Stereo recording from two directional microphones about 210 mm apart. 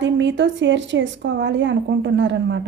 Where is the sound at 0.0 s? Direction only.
60° right (ahead or behind).